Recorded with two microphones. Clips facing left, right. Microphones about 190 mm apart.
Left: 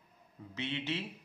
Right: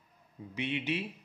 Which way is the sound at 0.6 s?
15° right (ahead or behind).